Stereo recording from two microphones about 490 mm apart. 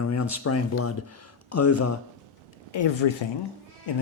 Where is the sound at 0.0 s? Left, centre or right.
Left.